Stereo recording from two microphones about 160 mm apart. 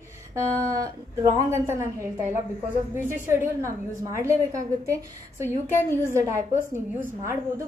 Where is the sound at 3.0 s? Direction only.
15° right (ahead or behind).